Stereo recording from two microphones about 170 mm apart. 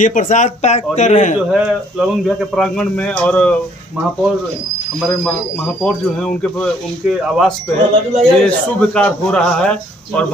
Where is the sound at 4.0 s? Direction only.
5° right (ahead or behind).